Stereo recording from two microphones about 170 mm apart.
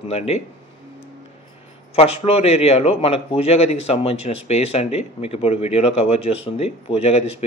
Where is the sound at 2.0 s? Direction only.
35° left (ahead or behind).